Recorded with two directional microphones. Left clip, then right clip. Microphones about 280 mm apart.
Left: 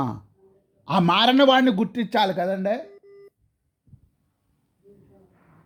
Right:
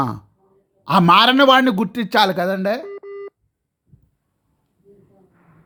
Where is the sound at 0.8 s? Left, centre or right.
Centre.